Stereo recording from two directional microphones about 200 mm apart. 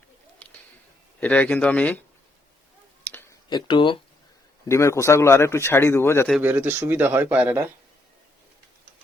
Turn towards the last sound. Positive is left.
turn(degrees=-10)  # may be behind; listen again after turning